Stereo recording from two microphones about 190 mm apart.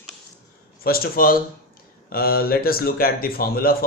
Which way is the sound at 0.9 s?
50° left (ahead or behind).